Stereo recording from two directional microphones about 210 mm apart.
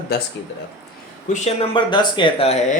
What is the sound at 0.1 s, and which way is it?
Speech, 50° left (ahead or behind).